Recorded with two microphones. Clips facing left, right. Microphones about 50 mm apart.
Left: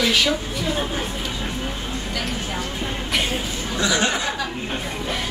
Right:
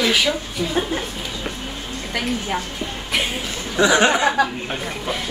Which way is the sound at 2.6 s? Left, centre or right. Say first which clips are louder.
Left 2 dB; left.